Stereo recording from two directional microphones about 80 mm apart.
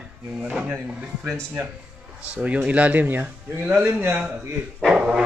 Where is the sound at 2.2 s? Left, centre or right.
Centre.